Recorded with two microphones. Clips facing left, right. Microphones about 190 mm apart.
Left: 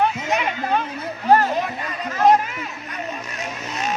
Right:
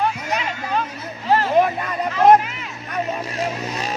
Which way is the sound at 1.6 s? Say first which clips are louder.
Right 9 dB; 55° right (ahead or behind).